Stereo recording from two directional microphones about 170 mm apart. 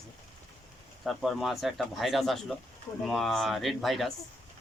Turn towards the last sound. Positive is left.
turn(degrees=0)  # may be behind; listen again after turning